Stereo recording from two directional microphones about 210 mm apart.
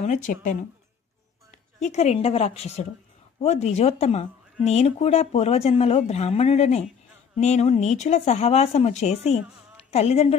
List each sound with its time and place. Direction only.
0.0 s speech: 35° left (ahead or behind)
1.8 s speech: 30° left (ahead or behind)